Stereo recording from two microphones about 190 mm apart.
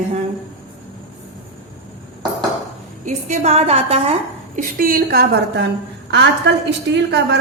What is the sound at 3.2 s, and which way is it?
Speech, 35° right (ahead or behind).